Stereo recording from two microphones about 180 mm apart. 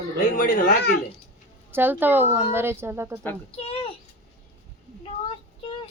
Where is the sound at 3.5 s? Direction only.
35° left (ahead or behind).